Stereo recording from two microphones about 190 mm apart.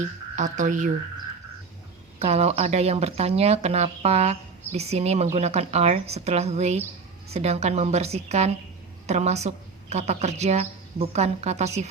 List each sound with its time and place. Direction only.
0.3 s speech: 40° right (ahead or behind)
2.1 s speech: 35° right (ahead or behind)